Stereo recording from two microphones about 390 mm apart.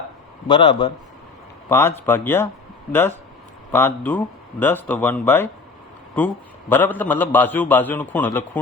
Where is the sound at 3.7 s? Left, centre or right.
Centre.